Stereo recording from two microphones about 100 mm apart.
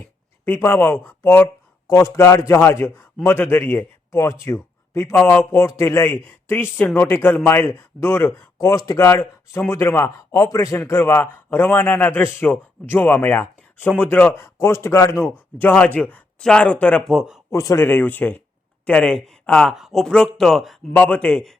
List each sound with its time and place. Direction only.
0.4 s a man's voice: 20° left (ahead or behind)
8.5 s a man's voice: 35° left (ahead or behind); by 17.1 s 10° left (ahead or behind)
17.1 s speech: 5° right (ahead or behind)
17.5 s speech: 30° left (ahead or behind)
17.8 s speech: 20° left (ahead or behind)
19.7 s speech: centre (ahead or behind)
20.9 s speech: 15° left (ahead or behind)